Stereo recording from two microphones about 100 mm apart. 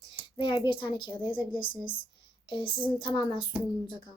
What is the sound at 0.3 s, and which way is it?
A woman's voice, 55° left (ahead or behind).